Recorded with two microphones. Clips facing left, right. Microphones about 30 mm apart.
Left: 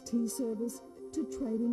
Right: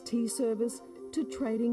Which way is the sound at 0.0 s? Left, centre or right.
Right.